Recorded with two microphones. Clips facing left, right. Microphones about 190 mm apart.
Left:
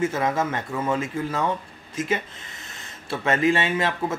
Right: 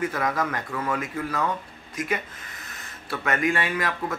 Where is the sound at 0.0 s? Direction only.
25° left (ahead or behind).